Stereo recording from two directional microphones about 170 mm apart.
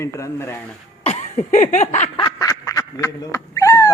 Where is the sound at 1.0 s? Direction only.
45° left (ahead or behind).